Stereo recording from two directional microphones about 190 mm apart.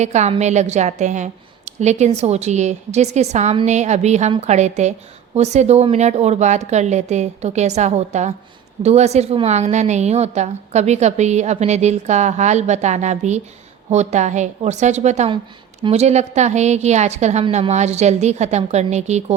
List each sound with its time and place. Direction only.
0.0 s a woman's voice: 35° right (ahead or behind)